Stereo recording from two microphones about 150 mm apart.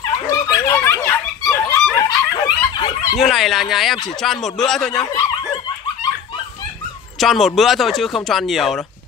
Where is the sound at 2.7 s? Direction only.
30° left (ahead or behind).